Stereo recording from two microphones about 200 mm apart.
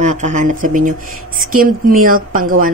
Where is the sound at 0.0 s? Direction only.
40° right (ahead or behind).